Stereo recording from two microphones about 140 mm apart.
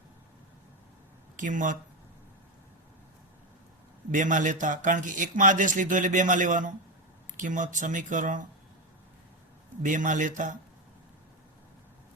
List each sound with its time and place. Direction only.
1.4 s a man's voice: 65° right (ahead or behind)
4.1 s a man's voice: 65° right (ahead or behind)
9.8 s a man's voice: 65° right (ahead or behind)